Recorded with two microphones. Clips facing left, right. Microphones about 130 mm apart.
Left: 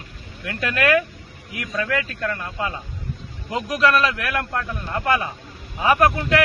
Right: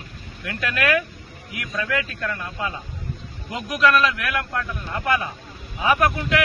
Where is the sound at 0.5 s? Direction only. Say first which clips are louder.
Left 3 dB; 30° left (ahead or behind).